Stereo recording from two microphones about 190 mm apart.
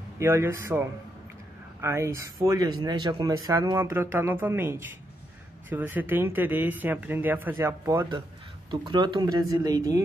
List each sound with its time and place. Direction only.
0.2 s speech: 15° right (ahead or behind)